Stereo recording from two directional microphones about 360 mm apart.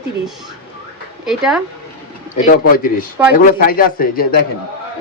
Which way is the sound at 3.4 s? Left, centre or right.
Left.